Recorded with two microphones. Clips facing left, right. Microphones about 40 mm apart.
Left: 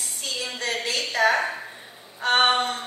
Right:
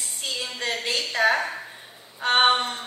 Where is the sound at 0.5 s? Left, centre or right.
Right.